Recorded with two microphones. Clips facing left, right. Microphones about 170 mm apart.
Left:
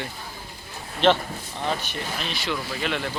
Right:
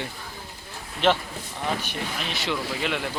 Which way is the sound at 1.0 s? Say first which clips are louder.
Left 2 dB; 10° right (ahead or behind).